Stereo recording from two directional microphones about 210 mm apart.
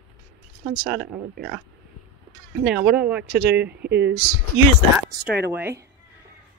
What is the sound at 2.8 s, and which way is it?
Speech, 5° right (ahead or behind).